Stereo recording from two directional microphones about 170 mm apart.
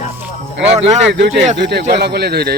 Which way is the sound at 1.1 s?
90° right.